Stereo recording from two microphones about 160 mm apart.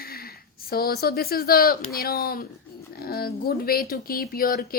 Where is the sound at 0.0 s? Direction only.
70° left (ahead or behind).